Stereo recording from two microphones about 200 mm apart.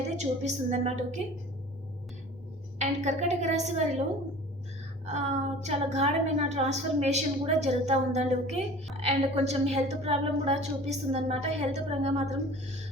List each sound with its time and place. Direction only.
0.2 s a woman's voice: 35° right (ahead or behind)
2.7 s a woman's voice: 35° right (ahead or behind)
5.1 s a woman's voice: 35° right (ahead or behind)